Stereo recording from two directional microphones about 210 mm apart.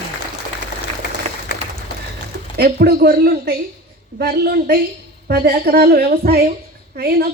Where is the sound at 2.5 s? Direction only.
50° right (ahead or behind).